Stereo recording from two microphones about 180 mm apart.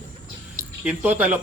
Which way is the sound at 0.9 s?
10° right (ahead or behind).